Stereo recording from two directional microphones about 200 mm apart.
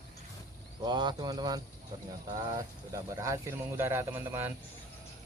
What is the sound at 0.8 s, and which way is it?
Speech, 20° right (ahead or behind).